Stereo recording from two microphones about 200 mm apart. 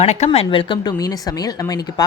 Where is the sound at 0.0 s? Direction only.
35° left (ahead or behind).